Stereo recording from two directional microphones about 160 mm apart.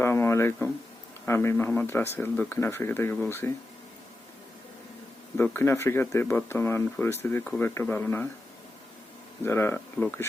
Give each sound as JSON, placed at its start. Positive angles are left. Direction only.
{"t": 0.0, "sound": "a sound", "side_deg": 15}
{"t": 1.2, "sound": "speech", "side_deg": 15}
{"t": 5.4, "sound": "speech", "side_deg": 15}
{"t": 9.4, "sound": "speech", "side_deg": 15}